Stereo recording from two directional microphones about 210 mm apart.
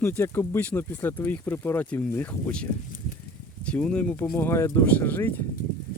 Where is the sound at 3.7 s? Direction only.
5° left (ahead or behind).